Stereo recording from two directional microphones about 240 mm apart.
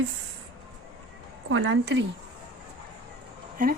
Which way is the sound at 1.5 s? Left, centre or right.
Right.